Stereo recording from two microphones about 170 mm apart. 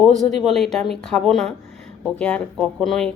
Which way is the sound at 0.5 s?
Centre (ahead or behind).